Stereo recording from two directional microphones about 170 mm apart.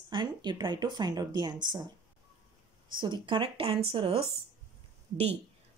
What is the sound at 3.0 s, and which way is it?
Speech, 30° right (ahead or behind).